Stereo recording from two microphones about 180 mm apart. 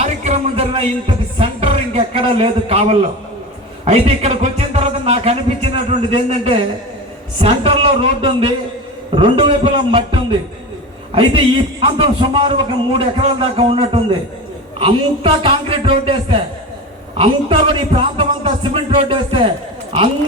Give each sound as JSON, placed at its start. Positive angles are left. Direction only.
{"t": 0.0, "sound": "music", "side_deg": -35}
{"t": 3.8, "sound": "a man's voice", "side_deg": -35}
{"t": 11.1, "sound": "a man's voice", "side_deg": -30}